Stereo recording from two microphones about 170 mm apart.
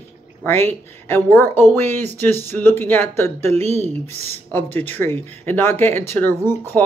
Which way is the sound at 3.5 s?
40° right (ahead or behind).